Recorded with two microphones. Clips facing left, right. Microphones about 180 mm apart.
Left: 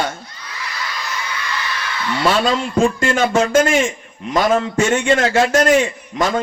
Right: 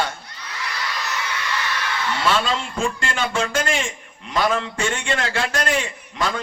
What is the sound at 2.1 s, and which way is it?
A man's voice, 40° left (ahead or behind).